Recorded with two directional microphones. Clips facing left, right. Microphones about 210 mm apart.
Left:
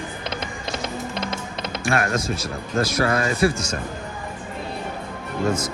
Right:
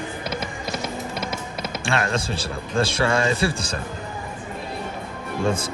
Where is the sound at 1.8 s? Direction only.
30° right (ahead or behind).